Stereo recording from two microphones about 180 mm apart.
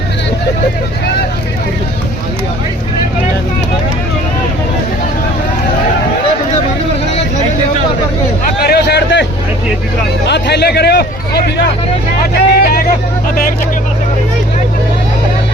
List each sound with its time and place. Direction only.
8.6 s a sound: 65° left (ahead or behind)
10.2 s hubbub: 70° left (ahead or behind)
12.5 s vehicle: 55° left (ahead or behind)